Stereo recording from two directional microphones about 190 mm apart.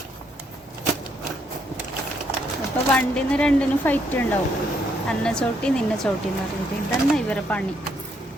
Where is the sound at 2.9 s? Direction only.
5° left (ahead or behind).